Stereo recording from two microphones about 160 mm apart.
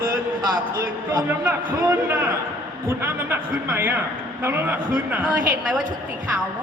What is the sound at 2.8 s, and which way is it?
A man's voice, 15° right (ahead or behind).